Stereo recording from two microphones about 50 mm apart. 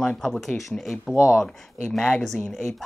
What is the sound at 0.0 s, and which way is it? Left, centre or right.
Speech, centre.